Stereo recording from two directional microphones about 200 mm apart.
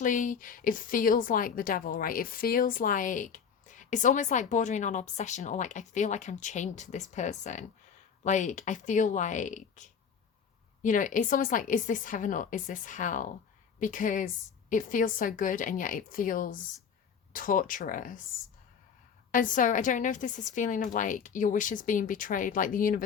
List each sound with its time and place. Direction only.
0.0 s a woman's voice: 40° left (ahead or behind)
19.3 s a woman's voice: 40° left (ahead or behind)